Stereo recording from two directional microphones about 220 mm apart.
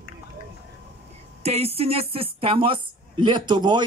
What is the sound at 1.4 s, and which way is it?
A woman's voice, 30° right (ahead or behind).